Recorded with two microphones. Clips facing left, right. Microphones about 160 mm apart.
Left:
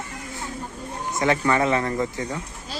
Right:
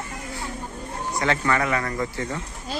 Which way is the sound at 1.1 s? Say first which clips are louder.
Left 2 dB; 20° left (ahead or behind).